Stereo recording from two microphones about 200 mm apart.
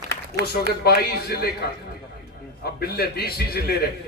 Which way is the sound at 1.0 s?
50° left (ahead or behind).